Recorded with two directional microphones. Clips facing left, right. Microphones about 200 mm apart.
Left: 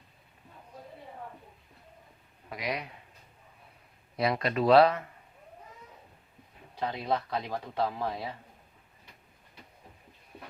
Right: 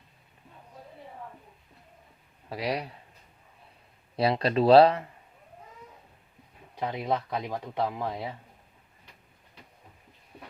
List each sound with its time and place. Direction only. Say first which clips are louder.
2.5 s speech: right 4 dB; 30° right (ahead or behind)
4.2 s speech: right 4 dB; 30° right (ahead or behind)
6.7 s speech: right 1 dB; 15° right (ahead or behind)